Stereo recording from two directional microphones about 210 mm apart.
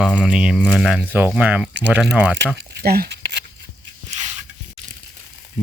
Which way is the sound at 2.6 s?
50° right (ahead or behind).